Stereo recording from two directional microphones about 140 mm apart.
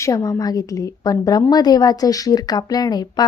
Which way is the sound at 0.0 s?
25° left (ahead or behind).